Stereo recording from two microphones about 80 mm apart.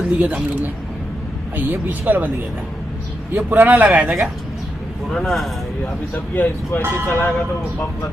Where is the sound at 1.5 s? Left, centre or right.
Right.